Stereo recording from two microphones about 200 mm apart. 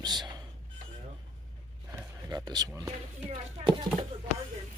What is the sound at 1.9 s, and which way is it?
Speech, 15° right (ahead or behind).